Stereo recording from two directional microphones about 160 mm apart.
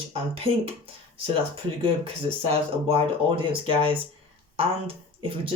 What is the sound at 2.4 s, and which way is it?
Speech, 35° right (ahead or behind).